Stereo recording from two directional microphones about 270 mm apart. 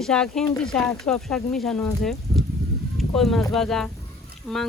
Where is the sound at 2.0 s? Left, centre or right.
Centre.